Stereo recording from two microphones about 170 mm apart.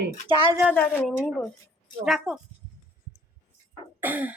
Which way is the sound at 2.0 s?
Centre (ahead or behind).